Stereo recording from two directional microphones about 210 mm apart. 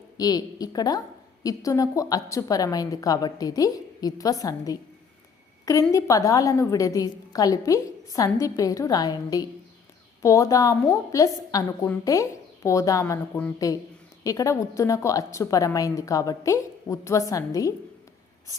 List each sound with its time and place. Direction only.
0.2 s a woman's voice: 15° left (ahead or behind)
5.9 s a woman's voice: 15° left (ahead or behind)